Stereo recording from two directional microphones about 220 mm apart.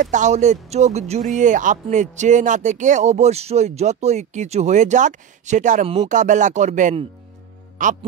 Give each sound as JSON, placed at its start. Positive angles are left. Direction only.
{"t": 0.0, "sound": "speech", "side_deg": -35}